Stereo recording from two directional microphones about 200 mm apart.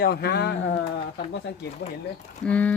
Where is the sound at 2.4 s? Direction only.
5° left (ahead or behind).